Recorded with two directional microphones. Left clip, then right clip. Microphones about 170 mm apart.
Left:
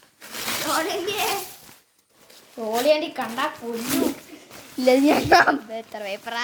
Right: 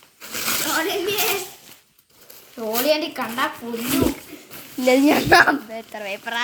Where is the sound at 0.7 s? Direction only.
55° left (ahead or behind).